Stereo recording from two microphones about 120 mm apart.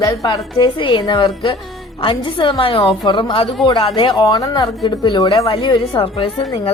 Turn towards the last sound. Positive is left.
turn(degrees=45)  # may be behind; listen again after turning